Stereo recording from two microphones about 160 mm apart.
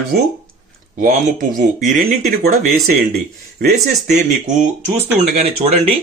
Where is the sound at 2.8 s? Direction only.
75° right (ahead or behind).